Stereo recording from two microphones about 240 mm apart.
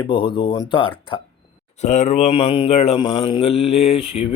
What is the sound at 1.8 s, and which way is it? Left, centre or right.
Speech, left.